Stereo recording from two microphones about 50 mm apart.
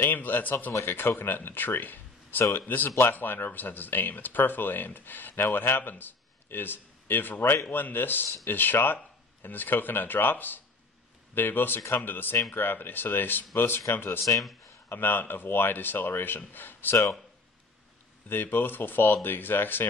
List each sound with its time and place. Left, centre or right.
0.0 s speech: left
0.7 s speech: left
18.3 s speech: left